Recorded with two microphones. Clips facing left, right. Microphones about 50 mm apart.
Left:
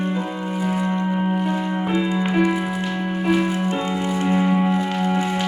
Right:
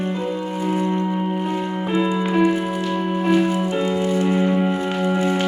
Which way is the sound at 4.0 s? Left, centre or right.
Left.